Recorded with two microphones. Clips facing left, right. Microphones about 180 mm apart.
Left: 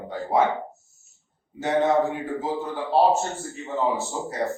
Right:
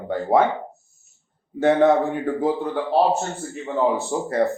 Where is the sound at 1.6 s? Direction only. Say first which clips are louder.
Right 5 dB; 60° right (ahead or behind).